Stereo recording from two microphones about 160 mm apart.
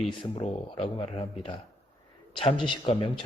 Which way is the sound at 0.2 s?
35° left (ahead or behind).